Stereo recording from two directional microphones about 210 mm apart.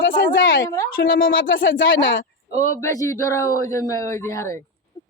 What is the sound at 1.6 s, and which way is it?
Speech, 65° left (ahead or behind).